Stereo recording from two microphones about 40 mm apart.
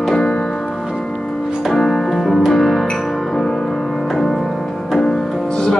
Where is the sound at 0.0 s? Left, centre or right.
Centre.